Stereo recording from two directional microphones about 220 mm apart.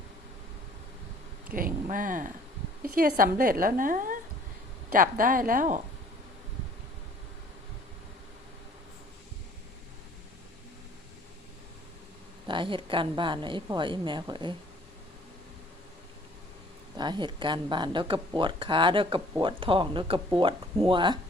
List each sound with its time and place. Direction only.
1.5 s a woman's voice: 40° right (ahead or behind)
12.5 s speech: 20° right (ahead or behind)
17.0 s speech: 20° right (ahead or behind)